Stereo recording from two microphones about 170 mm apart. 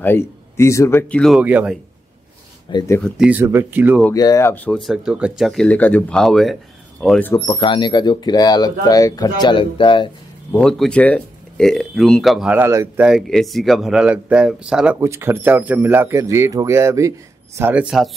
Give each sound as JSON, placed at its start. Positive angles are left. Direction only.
{"t": 0.0, "sound": "speech", "side_deg": 15}
{"t": 1.4, "sound": "speech", "side_deg": -10}
{"t": 3.0, "sound": "speech", "side_deg": -5}
{"t": 4.1, "sound": "speech", "side_deg": 20}
{"t": 7.3, "sound": "speech", "side_deg": 25}
{"t": 10.5, "sound": "speech", "side_deg": 5}